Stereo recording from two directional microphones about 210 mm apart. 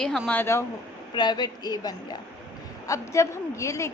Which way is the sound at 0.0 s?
5° left (ahead or behind).